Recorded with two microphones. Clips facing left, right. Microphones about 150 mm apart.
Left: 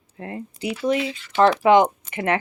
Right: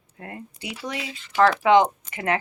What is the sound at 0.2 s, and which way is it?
Speech, 25° left (ahead or behind).